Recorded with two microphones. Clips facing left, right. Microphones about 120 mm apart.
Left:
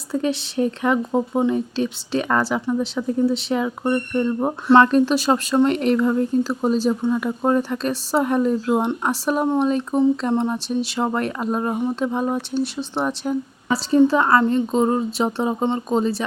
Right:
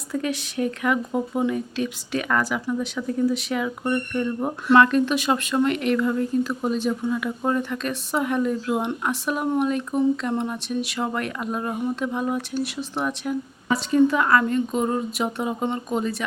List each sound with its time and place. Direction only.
0.1 s speech: 30° left (ahead or behind)